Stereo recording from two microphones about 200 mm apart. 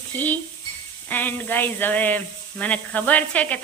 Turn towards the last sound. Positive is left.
turn(degrees=5)  # may be behind; listen again after turning